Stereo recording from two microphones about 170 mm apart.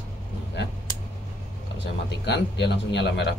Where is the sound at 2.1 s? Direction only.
85° left.